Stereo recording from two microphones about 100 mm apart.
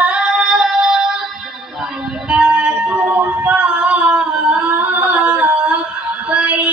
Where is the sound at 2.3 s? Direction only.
10° right (ahead or behind).